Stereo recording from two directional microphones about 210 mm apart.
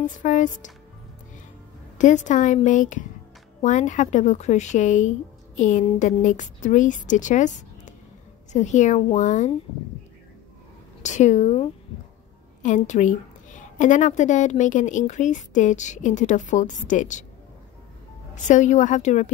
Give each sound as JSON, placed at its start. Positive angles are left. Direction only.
{"t": 0.0, "sound": "a woman's voice", "side_deg": 35}
{"t": 2.0, "sound": "a woman's voice", "side_deg": 35}
{"t": 11.0, "sound": "a woman's voice", "side_deg": 35}
{"t": 18.3, "sound": "a woman's voice", "side_deg": 35}